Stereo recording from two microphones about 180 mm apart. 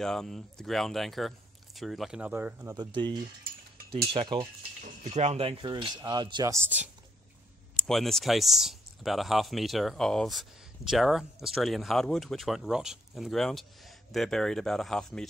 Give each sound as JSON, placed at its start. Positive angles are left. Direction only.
{"t": 0.0, "sound": "speech", "side_deg": 5}
{"t": 4.8, "sound": "speech", "side_deg": -40}
{"t": 7.8, "sound": "speech", "side_deg": 0}